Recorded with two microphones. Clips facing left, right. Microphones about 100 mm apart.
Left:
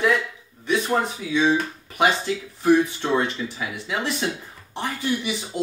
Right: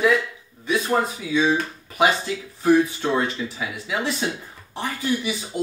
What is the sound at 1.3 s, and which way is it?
Speech, 5° right (ahead or behind).